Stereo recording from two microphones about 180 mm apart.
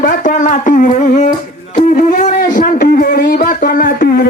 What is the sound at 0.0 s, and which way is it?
Music, 45° left (ahead or behind).